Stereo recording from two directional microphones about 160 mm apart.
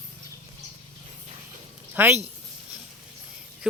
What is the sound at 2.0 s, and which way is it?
Speech, 15° right (ahead or behind).